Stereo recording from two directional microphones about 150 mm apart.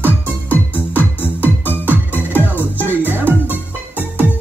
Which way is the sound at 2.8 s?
15° right (ahead or behind).